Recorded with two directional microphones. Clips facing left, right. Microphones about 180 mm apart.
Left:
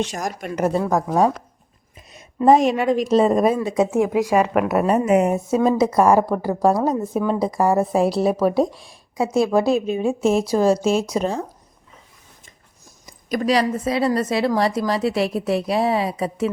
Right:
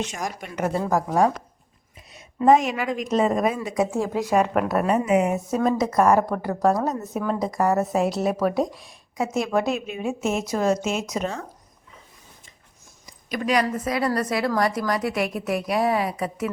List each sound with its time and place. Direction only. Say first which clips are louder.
0.0 s a woman's voice: left 4 dB; 40° left (ahead or behind)
0.9 s a woman's voice: even; centre (ahead or behind)
2.0 s a woman's voice: left 3 dB; 40° left (ahead or behind); by 4.1 s 25° left (ahead or behind)
4.1 s speech: left 3 dB; 10° left (ahead or behind)
4.9 s a woman's voice: left 3 dB; 45° left (ahead or behind)
5.5 s a woman's voice: left 5 dB; 30° left (ahead or behind)
7.3 s a woman's voice: left 2 dB; 30° left (ahead or behind)
13.3 s a woman's voice: left 4 dB; 35° left (ahead or behind)